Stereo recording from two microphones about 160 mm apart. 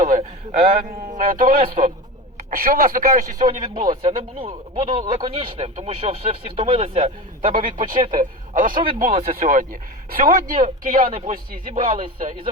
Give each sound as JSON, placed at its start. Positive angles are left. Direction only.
{"t": 0.0, "sound": "a man's voice", "side_deg": -45}
{"t": 0.9, "sound": "a woman's voice", "side_deg": -60}
{"t": 4.0, "sound": "speech", "side_deg": -35}
{"t": 7.4, "sound": "a woman's voice", "side_deg": -60}